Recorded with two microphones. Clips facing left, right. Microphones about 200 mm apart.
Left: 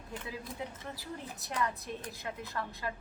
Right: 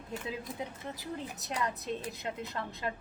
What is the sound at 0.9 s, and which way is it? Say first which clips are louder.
A woman's voice: right 3 dB; 20° right (ahead or behind).